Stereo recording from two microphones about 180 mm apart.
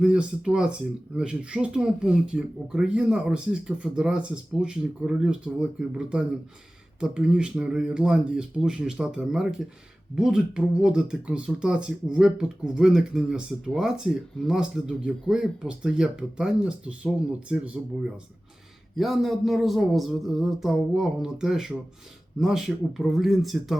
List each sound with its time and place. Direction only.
0.0 s speech: 5° right (ahead or behind)
18.9 s speech: centre (ahead or behind)